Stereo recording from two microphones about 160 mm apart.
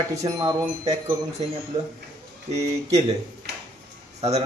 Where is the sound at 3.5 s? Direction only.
90° right.